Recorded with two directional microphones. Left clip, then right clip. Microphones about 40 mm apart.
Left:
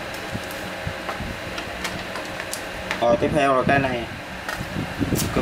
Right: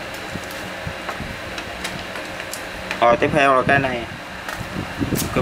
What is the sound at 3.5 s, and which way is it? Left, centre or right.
Speech, centre.